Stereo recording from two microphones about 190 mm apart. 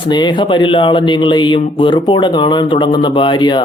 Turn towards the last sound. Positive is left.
turn(degrees=25)  # may be behind; listen again after turning